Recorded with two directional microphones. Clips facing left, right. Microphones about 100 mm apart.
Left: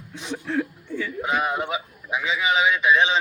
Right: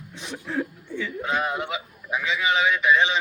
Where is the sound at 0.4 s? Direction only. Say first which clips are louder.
Left 2 dB; centre (ahead or behind).